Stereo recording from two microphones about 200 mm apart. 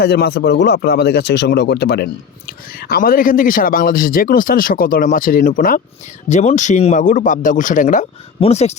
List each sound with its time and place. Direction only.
0.0 s speech: 50° left (ahead or behind); by 8.7 s 30° left (ahead or behind)